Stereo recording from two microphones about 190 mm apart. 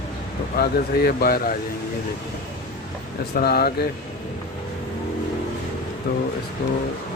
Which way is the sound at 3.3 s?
55° left (ahead or behind).